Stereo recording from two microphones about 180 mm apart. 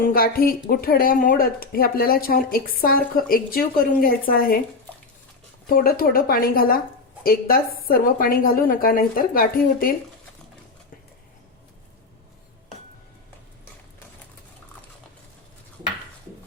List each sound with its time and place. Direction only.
0.0 s a woman's voice: 55° left (ahead or behind)
5.6 s a woman's voice: 50° left (ahead or behind)